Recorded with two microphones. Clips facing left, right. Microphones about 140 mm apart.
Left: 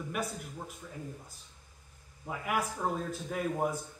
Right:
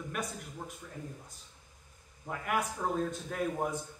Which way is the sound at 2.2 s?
5° left (ahead or behind).